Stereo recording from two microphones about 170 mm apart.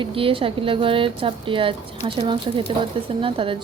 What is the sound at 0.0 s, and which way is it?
A woman's voice, 30° right (ahead or behind).